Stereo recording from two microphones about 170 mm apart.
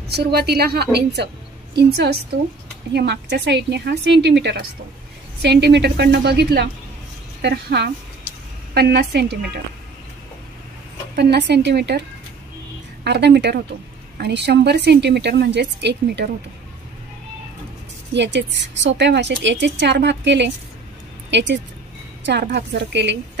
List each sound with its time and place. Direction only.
0.1 s a woman's voice: 70° right (ahead or behind)
11.1 s a woman's voice: 80° right
13.0 s a woman's voice: 80° right
18.1 s a woman's voice: 90° right